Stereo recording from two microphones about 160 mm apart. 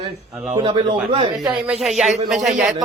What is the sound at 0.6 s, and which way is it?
Speech, 30° right (ahead or behind).